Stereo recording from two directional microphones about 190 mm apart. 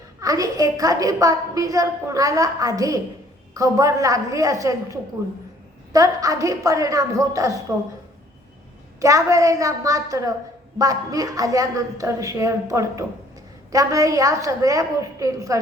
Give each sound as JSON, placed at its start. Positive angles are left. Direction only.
{"t": 0.2, "sound": "a woman's voice", "side_deg": -20}
{"t": 9.0, "sound": "a woman's voice", "side_deg": -15}